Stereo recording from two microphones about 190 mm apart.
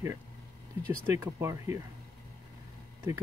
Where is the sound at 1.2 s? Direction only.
15° right (ahead or behind).